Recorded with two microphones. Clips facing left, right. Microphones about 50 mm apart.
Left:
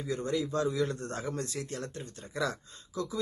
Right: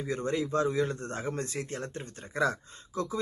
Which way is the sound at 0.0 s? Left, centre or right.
Right.